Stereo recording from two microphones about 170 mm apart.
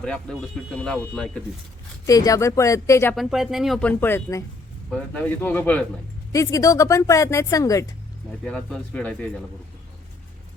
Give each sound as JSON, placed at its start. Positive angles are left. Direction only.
{"t": 0.0, "sound": "speech", "side_deg": 5}
{"t": 2.0, "sound": "speech", "side_deg": 20}
{"t": 3.2, "sound": "speech", "side_deg": 0}
{"t": 8.4, "sound": "speech", "side_deg": 5}